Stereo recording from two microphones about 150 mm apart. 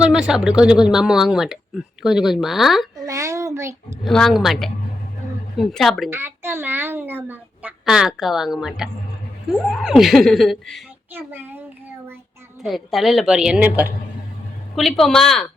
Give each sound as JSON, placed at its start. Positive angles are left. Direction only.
{"t": 0.0, "sound": "speech", "side_deg": -5}
{"t": 3.1, "sound": "a child's voice", "side_deg": -20}
{"t": 4.0, "sound": "speech", "side_deg": 0}
{"t": 6.1, "sound": "a woman's voice", "side_deg": -15}
{"t": 11.1, "sound": "a woman's voice", "side_deg": -15}
{"t": 12.6, "sound": "speech", "side_deg": 0}
{"t": 14.8, "sound": "speech", "side_deg": 0}